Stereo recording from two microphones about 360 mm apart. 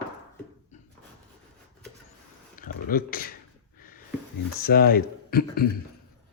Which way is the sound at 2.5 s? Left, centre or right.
Left.